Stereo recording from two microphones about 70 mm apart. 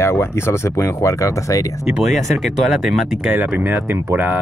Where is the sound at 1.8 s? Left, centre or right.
Centre.